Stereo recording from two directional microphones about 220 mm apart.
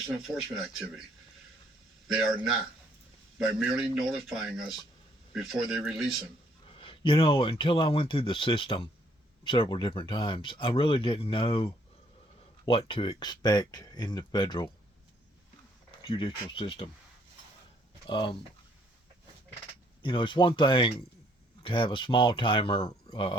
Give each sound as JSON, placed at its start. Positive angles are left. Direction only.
{"t": 0.0, "sound": "a man's voice", "side_deg": 0}
{"t": 2.0, "sound": "a man's voice", "side_deg": -5}
{"t": 6.7, "sound": "speech", "side_deg": 25}
{"t": 16.0, "sound": "speech", "side_deg": 25}
{"t": 18.1, "sound": "speech", "side_deg": 20}
{"t": 20.0, "sound": "speech", "side_deg": 20}